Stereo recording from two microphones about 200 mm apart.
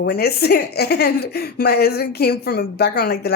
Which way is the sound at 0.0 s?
50° left (ahead or behind).